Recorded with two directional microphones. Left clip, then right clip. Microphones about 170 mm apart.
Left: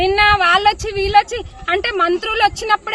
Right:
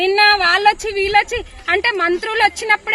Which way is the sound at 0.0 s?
25° left (ahead or behind).